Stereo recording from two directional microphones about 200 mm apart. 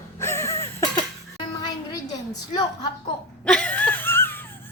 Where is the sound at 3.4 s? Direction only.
5° left (ahead or behind).